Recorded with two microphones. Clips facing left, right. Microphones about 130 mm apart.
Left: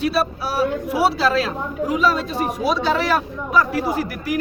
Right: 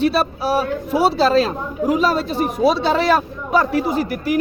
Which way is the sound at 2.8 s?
30° right (ahead or behind).